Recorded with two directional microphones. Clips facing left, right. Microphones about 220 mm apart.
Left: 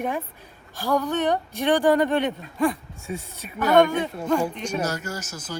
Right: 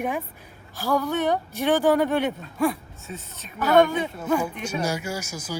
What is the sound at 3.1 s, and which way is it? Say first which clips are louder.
Speech: left 5 dB; 10° left (ahead or behind).